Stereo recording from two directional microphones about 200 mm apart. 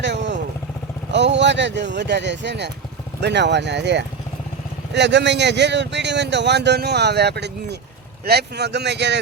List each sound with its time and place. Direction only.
0.0 s vehicle: 60° right (ahead or behind)
1.1 s speech: 60° right (ahead or behind)